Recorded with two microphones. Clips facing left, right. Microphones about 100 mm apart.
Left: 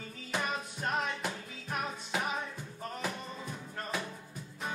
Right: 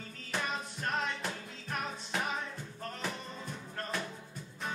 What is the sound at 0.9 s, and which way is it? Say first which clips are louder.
Music: left 1 dB; 5° left (ahead or behind).